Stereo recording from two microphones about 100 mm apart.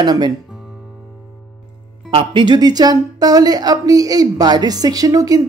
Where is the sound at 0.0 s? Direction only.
45° right (ahead or behind).